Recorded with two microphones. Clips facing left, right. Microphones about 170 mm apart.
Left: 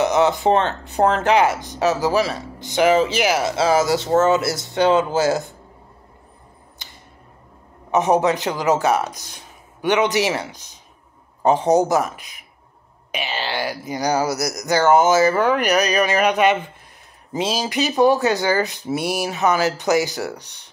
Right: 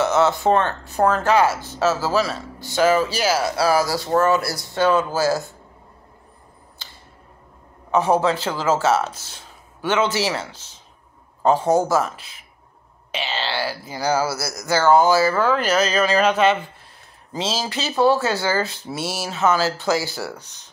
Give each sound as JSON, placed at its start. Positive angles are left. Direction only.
{"t": 0.0, "sound": "speech", "side_deg": 15}
{"t": 7.9, "sound": "speech", "side_deg": 20}
{"t": 20.3, "sound": "speech", "side_deg": 65}